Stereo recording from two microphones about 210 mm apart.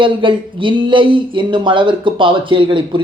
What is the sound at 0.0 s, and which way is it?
Speech, 25° right (ahead or behind).